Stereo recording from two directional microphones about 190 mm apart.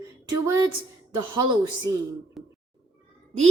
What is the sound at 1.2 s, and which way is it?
Speech, 25° right (ahead or behind).